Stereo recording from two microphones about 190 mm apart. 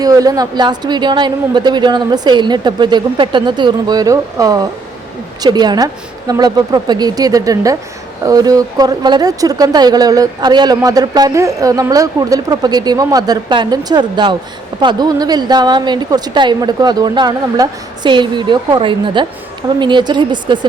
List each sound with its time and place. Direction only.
0.0 s a woman's voice: 20° right (ahead or behind)